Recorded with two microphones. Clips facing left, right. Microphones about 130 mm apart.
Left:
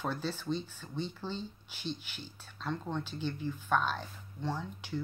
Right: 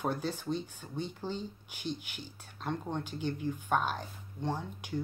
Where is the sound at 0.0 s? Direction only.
15° right (ahead or behind).